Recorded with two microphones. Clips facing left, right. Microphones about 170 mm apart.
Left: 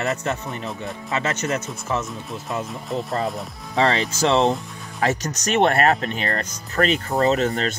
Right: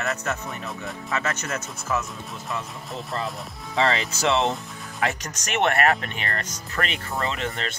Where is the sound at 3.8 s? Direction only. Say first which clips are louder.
Left 4 dB; 35° left (ahead or behind).